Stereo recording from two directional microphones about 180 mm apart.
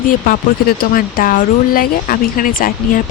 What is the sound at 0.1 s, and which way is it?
Speech, 55° left (ahead or behind).